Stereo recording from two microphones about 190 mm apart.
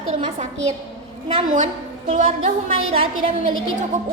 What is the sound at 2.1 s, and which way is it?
A woman's voice, 35° right (ahead or behind).